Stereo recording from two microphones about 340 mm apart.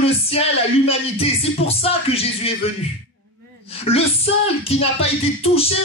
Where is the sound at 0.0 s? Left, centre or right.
Centre.